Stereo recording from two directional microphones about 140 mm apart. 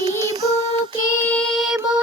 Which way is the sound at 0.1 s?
25° right (ahead or behind).